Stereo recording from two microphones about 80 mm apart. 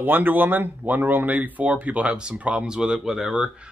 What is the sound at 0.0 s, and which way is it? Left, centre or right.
Speech, right.